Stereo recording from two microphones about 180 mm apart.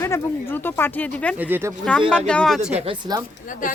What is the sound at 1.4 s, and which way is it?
Speech, 10° right (ahead or behind).